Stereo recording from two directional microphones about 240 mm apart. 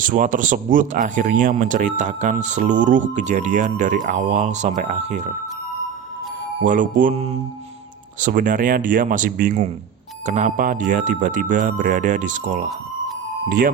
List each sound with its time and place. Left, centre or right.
0.0 s speech: right
6.6 s speech: right